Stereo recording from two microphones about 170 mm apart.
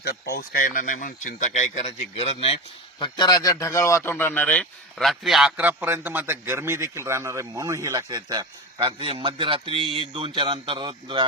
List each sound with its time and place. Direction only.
0.3 s speech: 55° left (ahead or behind); by 2.6 s 35° left (ahead or behind)
3.0 s speech: 25° left (ahead or behind); by 11.3 s 30° right (ahead or behind)